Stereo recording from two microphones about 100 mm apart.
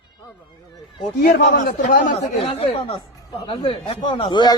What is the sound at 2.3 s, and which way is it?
Speech, 80° left.